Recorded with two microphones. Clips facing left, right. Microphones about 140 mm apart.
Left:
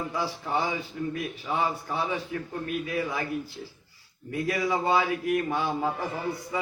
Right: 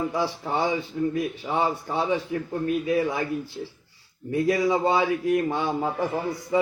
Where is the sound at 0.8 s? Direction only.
25° right (ahead or behind).